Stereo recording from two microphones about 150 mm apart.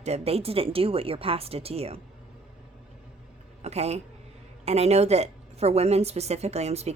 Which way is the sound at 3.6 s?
45° right (ahead or behind).